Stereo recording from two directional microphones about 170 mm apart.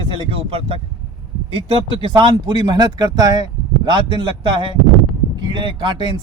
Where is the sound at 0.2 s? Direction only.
35° right (ahead or behind).